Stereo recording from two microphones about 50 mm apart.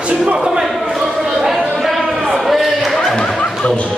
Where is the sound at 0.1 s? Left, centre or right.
Centre.